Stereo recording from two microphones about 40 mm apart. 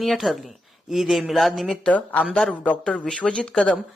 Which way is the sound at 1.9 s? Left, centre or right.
Left.